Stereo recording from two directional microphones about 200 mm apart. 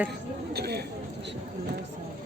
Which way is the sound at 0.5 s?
55° right (ahead or behind).